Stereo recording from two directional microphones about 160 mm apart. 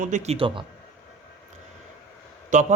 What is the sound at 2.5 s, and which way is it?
Speech, 50° right (ahead or behind).